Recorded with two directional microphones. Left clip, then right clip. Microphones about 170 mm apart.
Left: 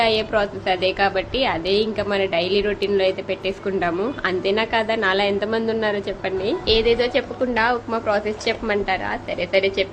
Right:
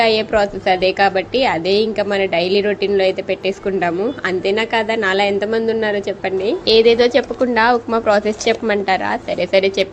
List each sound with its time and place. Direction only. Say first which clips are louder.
0.0 s a woman's voice: right 5 dB; 20° right (ahead or behind)
6.7 s a woman's voice: right 7 dB; 30° right (ahead or behind)